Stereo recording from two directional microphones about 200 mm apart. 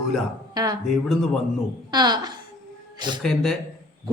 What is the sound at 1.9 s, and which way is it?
Speech, 20° right (ahead or behind).